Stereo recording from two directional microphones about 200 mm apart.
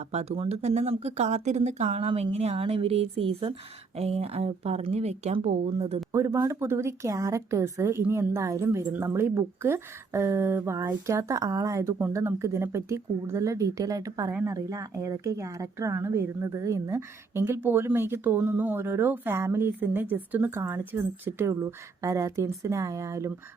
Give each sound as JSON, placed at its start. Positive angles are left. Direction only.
{"t": 0.0, "sound": "speech", "side_deg": -30}
{"t": 6.1, "sound": "speech", "side_deg": -15}